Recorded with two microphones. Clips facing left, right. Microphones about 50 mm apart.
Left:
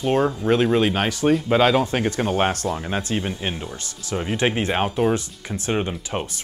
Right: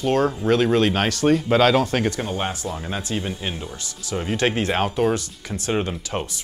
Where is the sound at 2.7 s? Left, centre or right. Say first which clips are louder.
Left 2 dB; left.